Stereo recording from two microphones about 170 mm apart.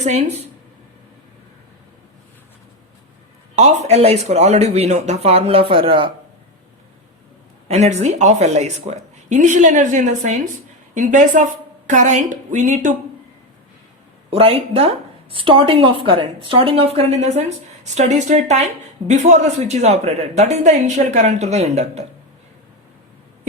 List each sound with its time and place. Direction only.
0.0 s speech: 40° right (ahead or behind)
3.5 s speech: 40° right (ahead or behind)
7.7 s speech: 40° right (ahead or behind)
14.3 s speech: 35° right (ahead or behind)